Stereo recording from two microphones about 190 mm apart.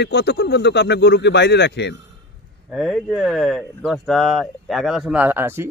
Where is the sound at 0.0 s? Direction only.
60° left (ahead or behind).